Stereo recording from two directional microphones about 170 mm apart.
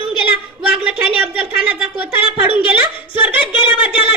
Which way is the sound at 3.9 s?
30° left (ahead or behind).